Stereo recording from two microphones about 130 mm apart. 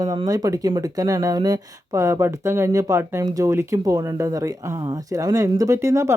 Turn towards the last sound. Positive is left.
turn(degrees=-20)  # may be behind; listen again after turning